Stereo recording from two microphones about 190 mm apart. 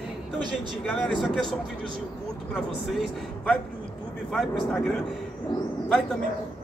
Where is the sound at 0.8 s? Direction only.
5° left (ahead or behind).